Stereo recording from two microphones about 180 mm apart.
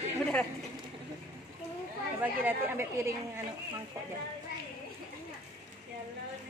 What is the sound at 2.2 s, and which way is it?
Speech, 10° right (ahead or behind).